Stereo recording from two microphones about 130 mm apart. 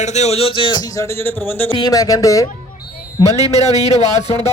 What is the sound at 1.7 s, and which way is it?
Speech, 30° left (ahead or behind).